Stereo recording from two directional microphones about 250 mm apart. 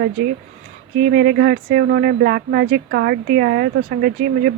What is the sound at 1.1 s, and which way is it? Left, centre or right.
Speech, right.